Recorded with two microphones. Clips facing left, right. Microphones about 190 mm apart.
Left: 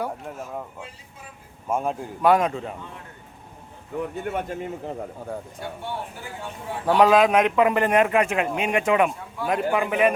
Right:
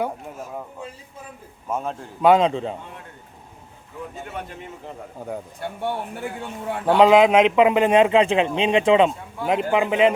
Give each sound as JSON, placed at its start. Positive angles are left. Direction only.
{"t": 1.7, "sound": "a man's voice", "side_deg": 10}
{"t": 2.2, "sound": "a man's voice", "side_deg": -25}
{"t": 4.1, "sound": "speech", "side_deg": 55}
{"t": 5.5, "sound": "speech", "side_deg": -60}
{"t": 6.8, "sound": "a man's voice", "side_deg": -25}